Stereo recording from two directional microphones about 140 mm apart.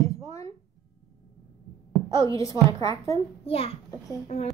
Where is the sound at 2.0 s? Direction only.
25° left (ahead or behind).